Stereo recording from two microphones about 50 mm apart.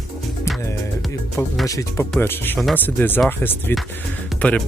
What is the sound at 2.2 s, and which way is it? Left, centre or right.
Speech, left.